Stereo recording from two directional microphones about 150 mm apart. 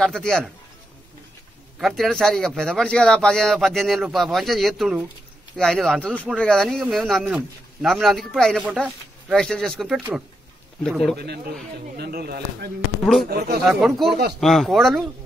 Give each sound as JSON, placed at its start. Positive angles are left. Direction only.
{"t": 0.0, "sound": "speech", "side_deg": 5}
{"t": 1.8, "sound": "speech", "side_deg": 0}
{"t": 11.1, "sound": "speech", "side_deg": -90}
{"t": 13.0, "sound": "speech", "side_deg": 5}
{"t": 13.3, "sound": "speech", "side_deg": -90}
{"t": 13.7, "sound": "speech", "side_deg": 0}